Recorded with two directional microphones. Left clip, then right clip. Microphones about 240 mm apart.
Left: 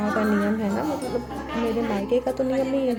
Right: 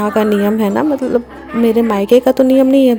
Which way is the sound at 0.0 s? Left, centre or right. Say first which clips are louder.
Right 10 dB; right.